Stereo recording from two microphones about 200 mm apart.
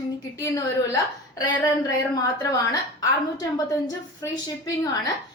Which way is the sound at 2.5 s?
20° left (ahead or behind).